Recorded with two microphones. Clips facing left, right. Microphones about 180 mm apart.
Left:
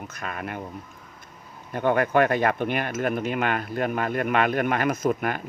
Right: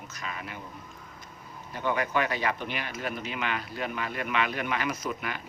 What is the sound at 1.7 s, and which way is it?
Speech, 55° left (ahead or behind).